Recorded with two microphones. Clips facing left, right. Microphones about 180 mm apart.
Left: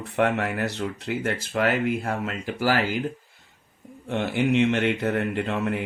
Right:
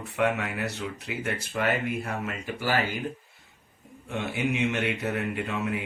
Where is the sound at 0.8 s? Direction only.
55° left (ahead or behind); by 2.8 s 85° left.